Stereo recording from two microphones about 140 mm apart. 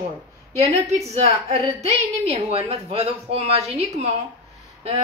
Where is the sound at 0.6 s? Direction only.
50° right (ahead or behind).